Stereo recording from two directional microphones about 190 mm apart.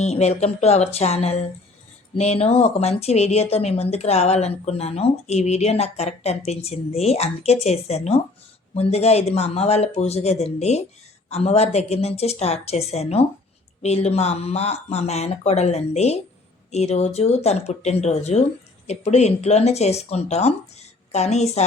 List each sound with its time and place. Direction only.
0.0 s speech: 35° left (ahead or behind)